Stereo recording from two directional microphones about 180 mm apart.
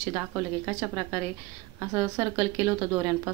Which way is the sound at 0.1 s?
15° right (ahead or behind).